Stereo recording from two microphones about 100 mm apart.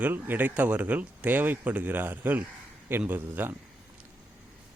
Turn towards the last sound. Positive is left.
turn(degrees=-20)  # may be behind; listen again after turning